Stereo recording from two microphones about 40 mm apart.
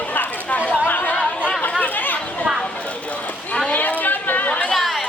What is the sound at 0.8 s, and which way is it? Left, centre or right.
Chatter, left.